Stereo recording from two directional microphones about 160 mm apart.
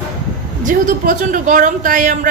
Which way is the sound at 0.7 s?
55° right (ahead or behind).